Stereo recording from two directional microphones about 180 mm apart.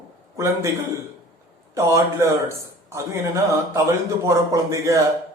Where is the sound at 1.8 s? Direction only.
15° right (ahead or behind).